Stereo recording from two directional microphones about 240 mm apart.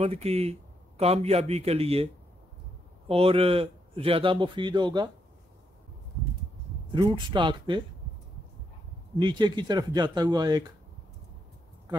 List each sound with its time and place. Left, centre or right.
0.0 s a man's voice: right
3.1 s a man's voice: right
6.9 s a man's voice: centre
9.1 s speech: centre